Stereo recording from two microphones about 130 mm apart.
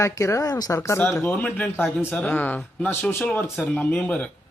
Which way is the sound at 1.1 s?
5° left (ahead or behind).